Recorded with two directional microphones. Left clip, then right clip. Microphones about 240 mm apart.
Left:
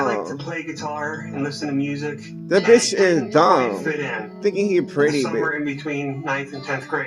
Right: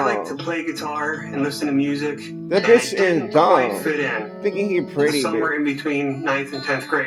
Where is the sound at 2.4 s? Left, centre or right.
Centre.